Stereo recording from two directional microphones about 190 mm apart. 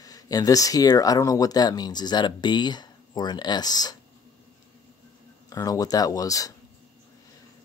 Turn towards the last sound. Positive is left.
turn(degrees=20)  # may be behind; listen again after turning